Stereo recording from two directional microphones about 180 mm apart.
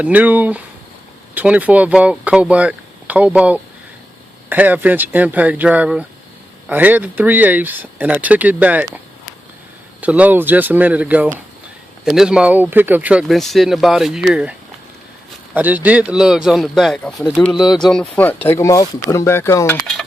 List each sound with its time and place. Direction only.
0.0 s speech: 10° right (ahead or behind)
10.0 s speech: 10° right (ahead or behind)
15.5 s speech: 10° right (ahead or behind); by 19.8 s 15° left (ahead or behind)